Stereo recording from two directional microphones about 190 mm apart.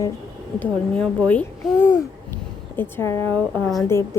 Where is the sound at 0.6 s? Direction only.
5° left (ahead or behind).